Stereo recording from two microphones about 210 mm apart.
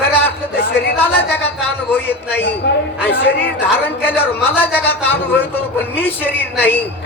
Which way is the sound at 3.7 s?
10° left (ahead or behind).